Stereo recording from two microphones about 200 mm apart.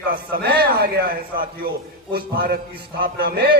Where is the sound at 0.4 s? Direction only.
50° right (ahead or behind).